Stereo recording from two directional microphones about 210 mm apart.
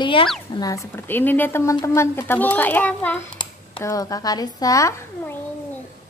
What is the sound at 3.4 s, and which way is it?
Speech, 20° left (ahead or behind).